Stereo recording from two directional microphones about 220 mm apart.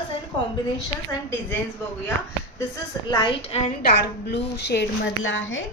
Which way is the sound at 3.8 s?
45° left (ahead or behind).